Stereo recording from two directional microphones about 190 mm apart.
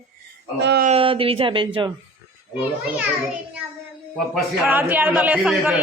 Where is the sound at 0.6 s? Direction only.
65° right (ahead or behind).